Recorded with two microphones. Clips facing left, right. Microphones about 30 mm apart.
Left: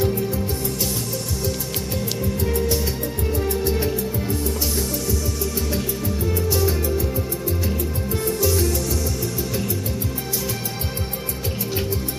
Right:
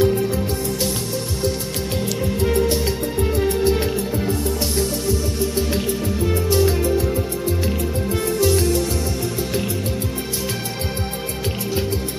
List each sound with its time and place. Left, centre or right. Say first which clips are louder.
0.0 s music: right 4 dB; right
2.4 s music: right 5 dB; right
5.0 s music: right 4 dB; right